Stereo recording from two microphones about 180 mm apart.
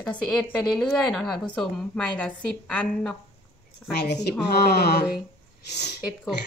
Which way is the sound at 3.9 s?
70° left (ahead or behind).